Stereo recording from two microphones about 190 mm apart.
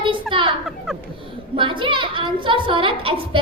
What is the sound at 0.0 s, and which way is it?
Children playing, 25° right (ahead or behind).